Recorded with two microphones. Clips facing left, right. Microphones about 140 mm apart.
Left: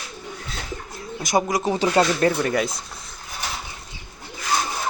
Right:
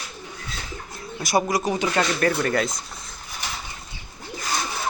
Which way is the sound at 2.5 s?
10° left (ahead or behind).